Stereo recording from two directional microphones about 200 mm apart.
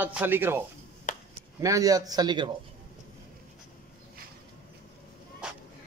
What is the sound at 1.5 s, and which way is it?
Speech, 15° right (ahead or behind).